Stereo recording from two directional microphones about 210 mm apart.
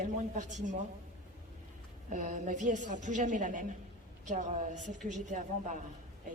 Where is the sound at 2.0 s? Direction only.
35° right (ahead or behind).